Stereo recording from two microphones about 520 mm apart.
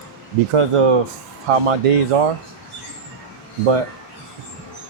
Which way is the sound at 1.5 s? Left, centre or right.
Right.